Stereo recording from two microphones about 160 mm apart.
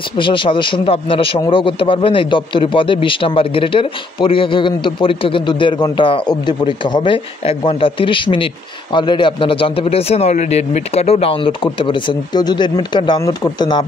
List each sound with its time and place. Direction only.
0.2 s a man's voice: 30° left (ahead or behind)